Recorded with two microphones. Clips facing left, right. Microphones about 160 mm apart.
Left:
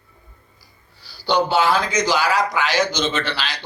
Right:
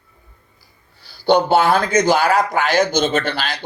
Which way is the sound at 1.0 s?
55° right (ahead or behind).